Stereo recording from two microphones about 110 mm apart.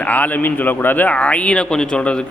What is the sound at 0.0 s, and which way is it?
Speech, 15° left (ahead or behind).